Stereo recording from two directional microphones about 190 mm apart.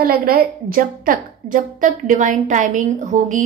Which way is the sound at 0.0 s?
50° right (ahead or behind).